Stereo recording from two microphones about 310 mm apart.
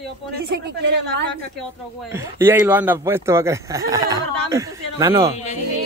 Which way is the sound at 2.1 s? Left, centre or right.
Centre.